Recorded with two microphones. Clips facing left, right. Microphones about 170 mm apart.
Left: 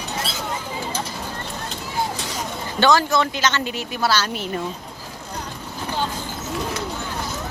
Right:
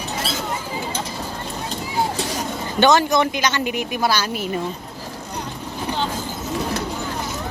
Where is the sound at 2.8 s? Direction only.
20° right (ahead or behind).